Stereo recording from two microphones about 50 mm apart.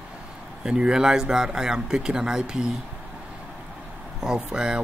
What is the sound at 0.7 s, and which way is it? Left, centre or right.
Speech, centre.